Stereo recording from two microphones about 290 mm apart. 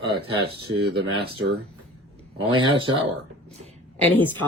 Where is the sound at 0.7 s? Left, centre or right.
Centre.